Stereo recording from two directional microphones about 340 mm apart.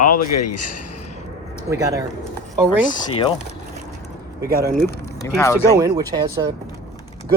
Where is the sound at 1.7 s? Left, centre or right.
Centre.